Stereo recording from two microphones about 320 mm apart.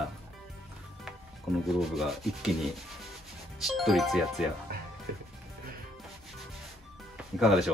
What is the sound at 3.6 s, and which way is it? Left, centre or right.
Rub, centre.